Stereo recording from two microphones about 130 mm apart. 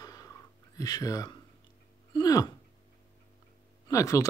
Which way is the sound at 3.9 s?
25° left (ahead or behind).